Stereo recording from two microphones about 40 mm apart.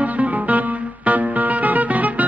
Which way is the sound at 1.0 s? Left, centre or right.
Right.